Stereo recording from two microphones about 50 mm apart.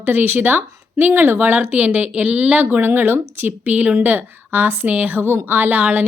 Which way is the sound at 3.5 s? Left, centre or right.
Right.